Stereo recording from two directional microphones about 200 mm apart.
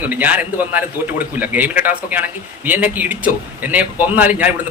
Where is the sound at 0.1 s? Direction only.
10° right (ahead or behind).